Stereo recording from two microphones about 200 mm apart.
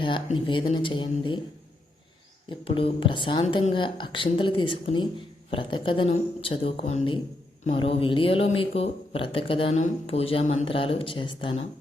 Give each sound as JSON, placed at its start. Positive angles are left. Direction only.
{"t": 0.0, "sound": "speech", "side_deg": 25}
{"t": 2.5, "sound": "speech", "side_deg": 25}